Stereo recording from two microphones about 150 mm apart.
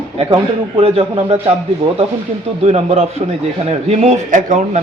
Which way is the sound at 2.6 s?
45° right (ahead or behind).